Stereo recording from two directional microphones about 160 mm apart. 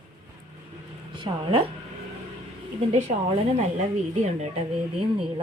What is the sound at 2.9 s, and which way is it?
Speech, 45° right (ahead or behind).